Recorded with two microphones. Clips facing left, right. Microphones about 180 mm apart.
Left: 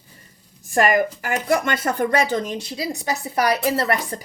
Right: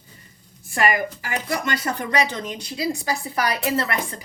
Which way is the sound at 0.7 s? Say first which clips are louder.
Left 4 dB; 45° left (ahead or behind).